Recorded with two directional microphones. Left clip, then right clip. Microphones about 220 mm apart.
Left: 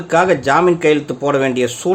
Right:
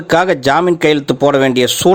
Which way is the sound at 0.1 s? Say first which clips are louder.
Right 2 dB; 40° right (ahead or behind).